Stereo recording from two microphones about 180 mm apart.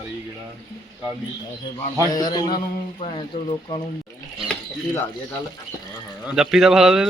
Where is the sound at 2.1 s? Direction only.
25° left (ahead or behind).